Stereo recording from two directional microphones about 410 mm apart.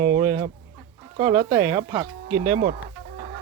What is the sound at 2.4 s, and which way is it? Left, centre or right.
Speech, right.